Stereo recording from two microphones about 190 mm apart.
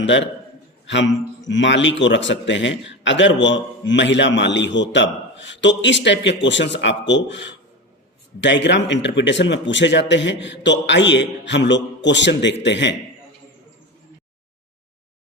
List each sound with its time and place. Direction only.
0.0 s a man's voice: 70° left (ahead or behind)